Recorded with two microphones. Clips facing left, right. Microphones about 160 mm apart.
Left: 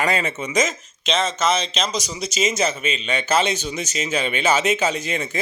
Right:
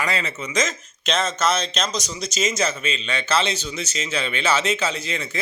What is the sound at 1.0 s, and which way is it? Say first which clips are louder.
Speech: left 1 dB; centre (ahead or behind).